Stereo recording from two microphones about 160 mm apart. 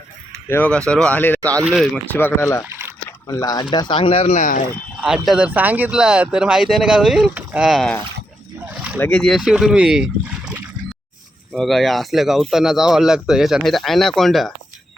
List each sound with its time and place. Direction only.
0.4 s speech: 15° left (ahead or behind)
1.6 s speech: centre (ahead or behind)
2.1 s speech: 15° left (ahead or behind)
2.6 s a sound: 15° right (ahead or behind)
3.1 s speech: 20° left (ahead or behind)
4.4 s speech: 55° left (ahead or behind)
4.9 s speech: 5° right (ahead or behind)
8.7 s a sound: 5° right (ahead or behind)
9.0 s speech: 10° left (ahead or behind)